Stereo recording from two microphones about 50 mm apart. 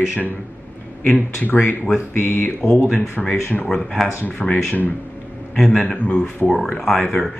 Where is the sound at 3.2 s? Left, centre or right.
Centre.